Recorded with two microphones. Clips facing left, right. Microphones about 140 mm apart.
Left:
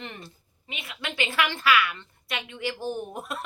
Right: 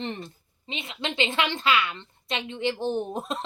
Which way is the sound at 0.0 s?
30° right (ahead or behind).